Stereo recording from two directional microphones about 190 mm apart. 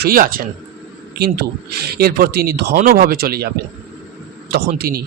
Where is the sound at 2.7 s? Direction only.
40° right (ahead or behind).